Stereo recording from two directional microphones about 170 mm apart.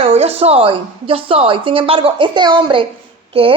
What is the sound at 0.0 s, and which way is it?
A woman's voice, 35° right (ahead or behind).